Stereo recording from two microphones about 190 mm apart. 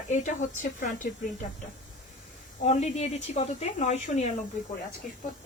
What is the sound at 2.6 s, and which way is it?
A woman's voice, 35° left (ahead or behind).